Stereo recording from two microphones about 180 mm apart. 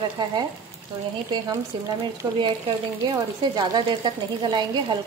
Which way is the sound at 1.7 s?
25° right (ahead or behind).